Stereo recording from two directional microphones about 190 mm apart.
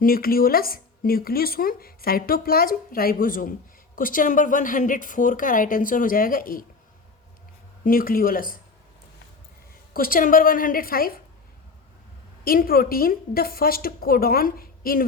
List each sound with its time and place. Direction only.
0.0 s speech: 50° left (ahead or behind)
7.9 s speech: 50° left (ahead or behind)
9.9 s speech: 50° left (ahead or behind)
12.5 s speech: 50° left (ahead or behind)